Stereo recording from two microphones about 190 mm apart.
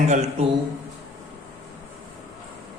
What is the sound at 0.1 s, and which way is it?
Speech, 35° right (ahead or behind).